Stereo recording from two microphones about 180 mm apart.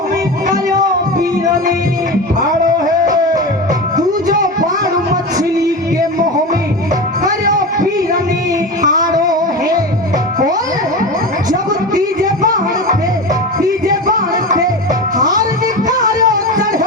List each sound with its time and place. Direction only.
9.0 s a sound: 20° right (ahead or behind)
13.8 s music: 45° right (ahead or behind)
15.2 s music: 20° right (ahead or behind)